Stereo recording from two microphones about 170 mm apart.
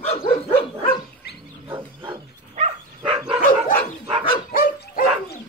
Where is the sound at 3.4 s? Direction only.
55° left (ahead or behind).